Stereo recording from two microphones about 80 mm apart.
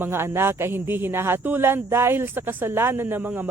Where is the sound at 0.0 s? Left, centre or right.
Right.